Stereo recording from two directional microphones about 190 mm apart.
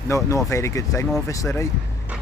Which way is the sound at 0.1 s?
15° left (ahead or behind).